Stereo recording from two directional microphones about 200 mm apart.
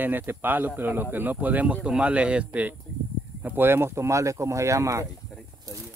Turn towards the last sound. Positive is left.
turn(degrees=0)  # may be behind; listen again after turning